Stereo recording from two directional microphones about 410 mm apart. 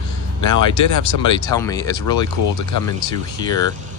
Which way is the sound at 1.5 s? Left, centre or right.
Centre.